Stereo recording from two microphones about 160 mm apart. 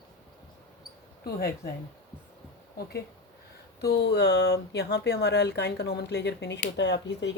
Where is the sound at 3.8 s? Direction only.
90° left.